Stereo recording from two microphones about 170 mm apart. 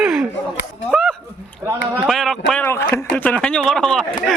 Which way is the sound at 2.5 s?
15° left (ahead or behind).